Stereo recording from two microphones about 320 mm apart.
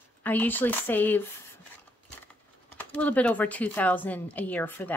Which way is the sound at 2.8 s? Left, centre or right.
Centre.